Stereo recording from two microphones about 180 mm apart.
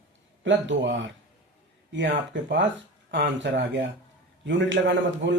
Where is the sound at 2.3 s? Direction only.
90° right.